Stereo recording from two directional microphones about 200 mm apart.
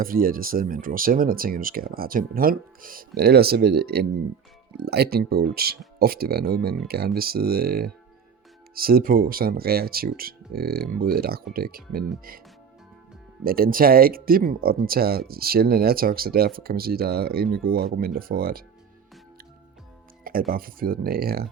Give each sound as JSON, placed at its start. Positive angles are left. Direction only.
{"t": 0.0, "sound": "speech", "side_deg": -45}
{"t": 13.4, "sound": "speech", "side_deg": -50}
{"t": 20.5, "sound": "speech", "side_deg": -45}